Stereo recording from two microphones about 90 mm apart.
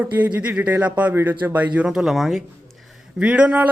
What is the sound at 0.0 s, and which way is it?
Speech, 20° right (ahead or behind).